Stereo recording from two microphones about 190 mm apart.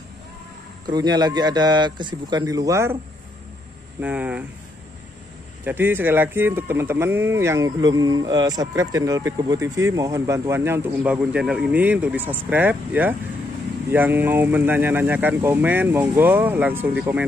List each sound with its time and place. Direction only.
0.8 s a man's voice: 20° right (ahead or behind)
4.0 s speech: 5° right (ahead or behind)
5.6 s speech: 10° right (ahead or behind)